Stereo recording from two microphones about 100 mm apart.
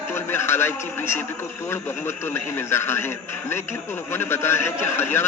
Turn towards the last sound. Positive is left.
turn(degrees=25)  # may be behind; listen again after turning